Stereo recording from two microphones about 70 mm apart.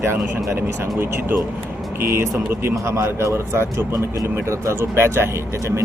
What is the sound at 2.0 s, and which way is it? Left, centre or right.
A man's voice, right.